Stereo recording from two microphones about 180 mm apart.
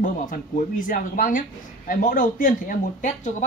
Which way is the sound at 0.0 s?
50° left (ahead or behind).